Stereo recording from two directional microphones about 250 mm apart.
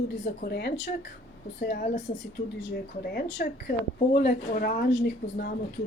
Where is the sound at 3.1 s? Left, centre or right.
Left.